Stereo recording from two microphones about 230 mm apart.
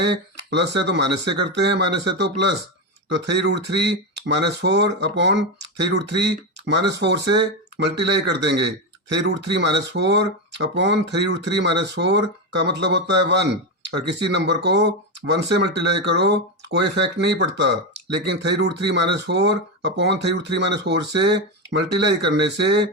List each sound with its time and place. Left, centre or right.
0.0 s speech: right